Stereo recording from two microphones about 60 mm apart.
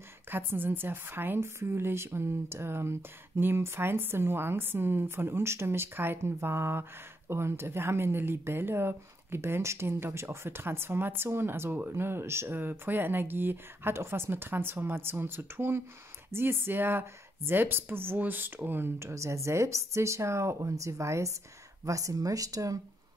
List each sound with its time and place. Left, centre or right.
0.3 s speech: right
18.9 s speech: right